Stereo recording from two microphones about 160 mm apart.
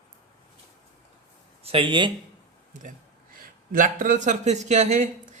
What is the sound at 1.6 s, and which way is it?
Speech, 35° right (ahead or behind).